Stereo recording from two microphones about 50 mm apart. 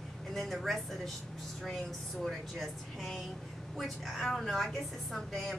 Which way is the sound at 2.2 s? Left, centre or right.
Centre.